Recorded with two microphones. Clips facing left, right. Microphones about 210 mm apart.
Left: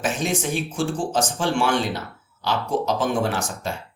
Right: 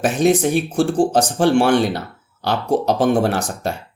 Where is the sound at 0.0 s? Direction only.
65° right (ahead or behind).